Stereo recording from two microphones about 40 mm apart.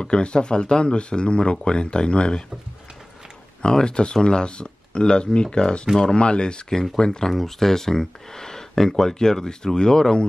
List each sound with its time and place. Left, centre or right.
0.0 s speech: left
3.6 s speech: left
7.2 s speech: centre